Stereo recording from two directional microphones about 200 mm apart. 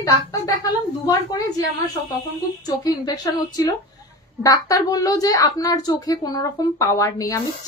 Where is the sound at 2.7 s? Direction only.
20° left (ahead or behind).